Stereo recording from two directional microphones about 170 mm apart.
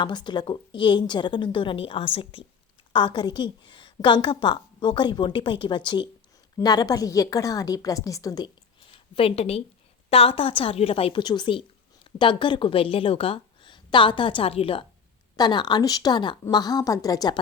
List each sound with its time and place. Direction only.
0.0 s a woman's voice: 25° left (ahead or behind)
8.9 s a woman's voice: 35° left (ahead or behind)